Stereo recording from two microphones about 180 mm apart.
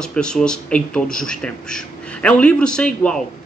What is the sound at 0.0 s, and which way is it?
A man's voice, 5° left (ahead or behind).